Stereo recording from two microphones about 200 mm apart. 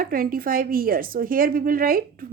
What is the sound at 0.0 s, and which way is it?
A woman's voice, 45° right (ahead or behind).